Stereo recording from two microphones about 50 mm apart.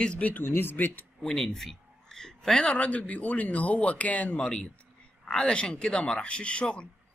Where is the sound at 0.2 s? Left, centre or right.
Left.